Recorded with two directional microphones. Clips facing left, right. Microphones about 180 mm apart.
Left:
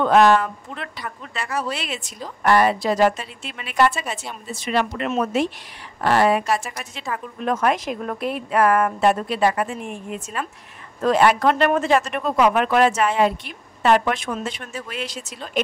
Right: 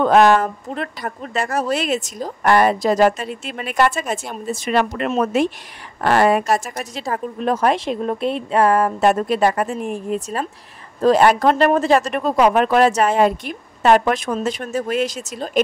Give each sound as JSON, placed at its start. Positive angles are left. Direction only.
{"t": 0.0, "sound": "speech", "side_deg": -45}
{"t": 9.0, "sound": "speech", "side_deg": -45}